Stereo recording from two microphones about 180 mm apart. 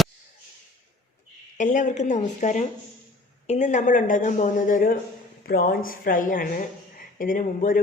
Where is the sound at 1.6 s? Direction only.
40° left (ahead or behind).